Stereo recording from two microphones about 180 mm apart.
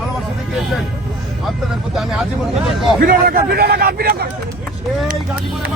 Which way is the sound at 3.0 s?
55° right (ahead or behind).